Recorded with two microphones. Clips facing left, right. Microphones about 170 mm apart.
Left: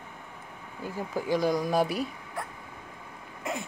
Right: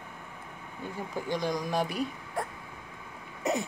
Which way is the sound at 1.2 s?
5° left (ahead or behind).